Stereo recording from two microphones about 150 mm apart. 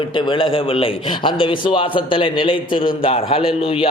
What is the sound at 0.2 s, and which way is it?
A man's voice, 35° left (ahead or behind).